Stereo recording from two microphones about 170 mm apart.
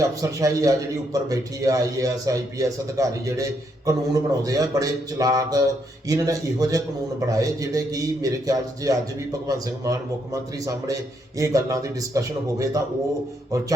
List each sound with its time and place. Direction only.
0.0 s a man's voice: 20° right (ahead or behind)
11.3 s a man's voice: 20° right (ahead or behind)